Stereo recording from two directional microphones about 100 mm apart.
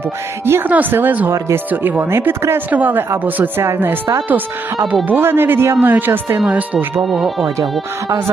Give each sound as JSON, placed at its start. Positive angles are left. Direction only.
{"t": 0.4, "sound": "speech", "side_deg": -20}
{"t": 7.0, "sound": "speech", "side_deg": 0}